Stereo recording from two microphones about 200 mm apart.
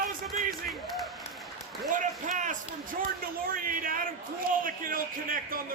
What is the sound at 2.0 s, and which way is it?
A man's voice, 40° right (ahead or behind).